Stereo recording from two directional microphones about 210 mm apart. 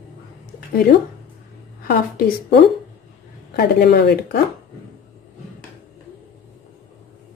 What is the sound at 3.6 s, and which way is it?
Speech, 50° left (ahead or behind).